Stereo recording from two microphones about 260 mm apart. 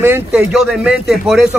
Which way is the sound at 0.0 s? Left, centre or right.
Centre.